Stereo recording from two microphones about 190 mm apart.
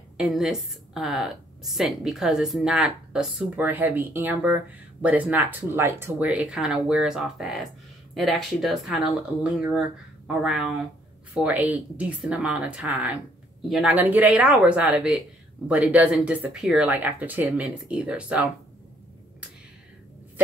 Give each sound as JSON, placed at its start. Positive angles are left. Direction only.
{"t": 0.2, "sound": "a woman's voice", "side_deg": -5}